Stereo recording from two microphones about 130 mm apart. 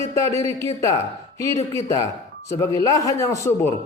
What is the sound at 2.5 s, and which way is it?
A man's voice, 25° left (ahead or behind).